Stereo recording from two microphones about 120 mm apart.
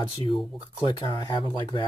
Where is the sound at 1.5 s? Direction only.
40° right (ahead or behind).